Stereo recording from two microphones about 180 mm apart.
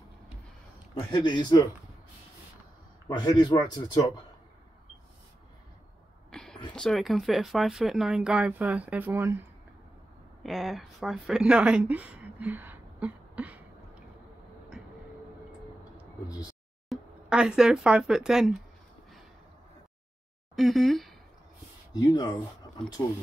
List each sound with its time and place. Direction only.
1.1 s speech: 25° left (ahead or behind)
3.1 s speech: 25° left (ahead or behind)
6.3 s a sound: 5° left (ahead or behind)
6.7 s speech: 5° left (ahead or behind)
10.4 s speech: centre (ahead or behind)
16.9 s speech: 5° right (ahead or behind)
20.5 s speech: centre (ahead or behind)
21.9 s speech: 20° left (ahead or behind)